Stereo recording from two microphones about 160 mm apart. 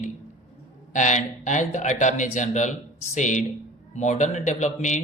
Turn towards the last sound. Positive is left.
turn(degrees=50)  # may be behind; listen again after turning